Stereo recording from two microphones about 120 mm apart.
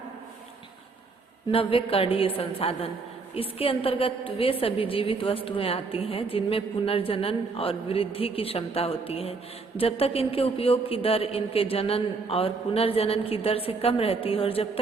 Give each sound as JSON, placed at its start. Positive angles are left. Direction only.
{"t": 1.5, "sound": "a woman's voice", "side_deg": 50}